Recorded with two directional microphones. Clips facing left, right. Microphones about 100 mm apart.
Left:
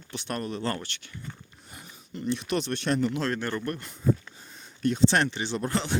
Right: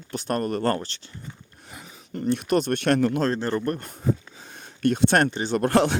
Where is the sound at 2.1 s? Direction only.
50° right (ahead or behind); by 3.2 s 65° right (ahead or behind).